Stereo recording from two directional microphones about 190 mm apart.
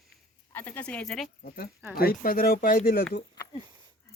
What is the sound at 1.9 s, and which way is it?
Speech, 50° left (ahead or behind).